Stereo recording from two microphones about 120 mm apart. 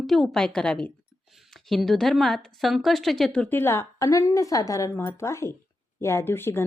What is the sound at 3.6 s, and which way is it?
Speech, 20° left (ahead or behind).